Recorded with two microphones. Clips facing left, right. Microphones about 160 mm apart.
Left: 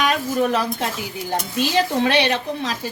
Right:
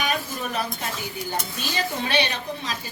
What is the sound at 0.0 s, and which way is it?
A woman's voice, 90° left.